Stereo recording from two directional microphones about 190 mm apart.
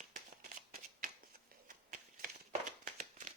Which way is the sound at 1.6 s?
45° right (ahead or behind).